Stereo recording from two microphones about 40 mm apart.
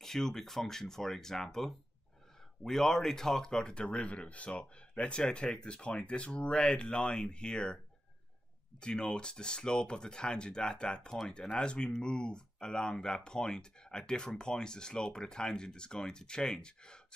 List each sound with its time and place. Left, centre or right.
0.0 s speech: centre